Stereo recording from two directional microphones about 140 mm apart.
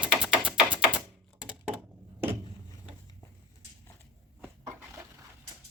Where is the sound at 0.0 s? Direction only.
5° right (ahead or behind).